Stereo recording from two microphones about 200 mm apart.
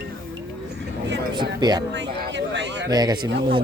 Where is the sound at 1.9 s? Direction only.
60° right (ahead or behind).